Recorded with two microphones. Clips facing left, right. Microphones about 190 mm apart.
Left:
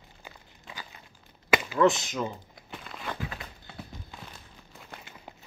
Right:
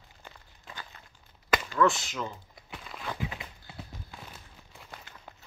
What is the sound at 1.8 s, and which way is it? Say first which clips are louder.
Speech: left 3 dB; 20° left (ahead or behind).